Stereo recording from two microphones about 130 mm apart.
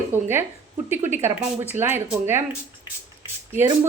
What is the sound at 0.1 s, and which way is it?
A woman's voice, 15° right (ahead or behind).